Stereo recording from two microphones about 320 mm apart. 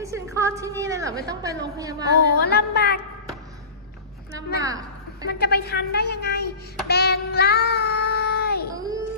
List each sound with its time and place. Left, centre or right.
0.0 s a woman's voice: centre
2.4 s music: left
4.6 s a woman's voice: centre
5.3 s a woman's voice: left
6.9 s child singing: left
8.7 s a sound: centre